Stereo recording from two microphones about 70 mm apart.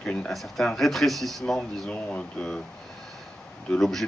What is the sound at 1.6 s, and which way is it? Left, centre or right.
Speech, centre.